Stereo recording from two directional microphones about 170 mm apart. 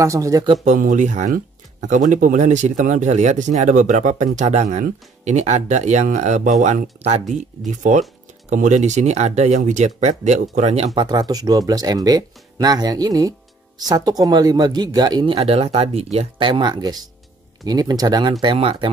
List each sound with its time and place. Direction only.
0.0 s speech: 20° right (ahead or behind)
0.7 s speech: 50° right (ahead or behind)
11.0 s speech: 25° right (ahead or behind)
15.3 s speech: 35° right (ahead or behind)